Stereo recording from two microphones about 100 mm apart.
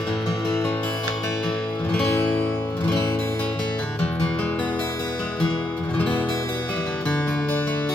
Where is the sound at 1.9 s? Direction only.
15° left (ahead or behind).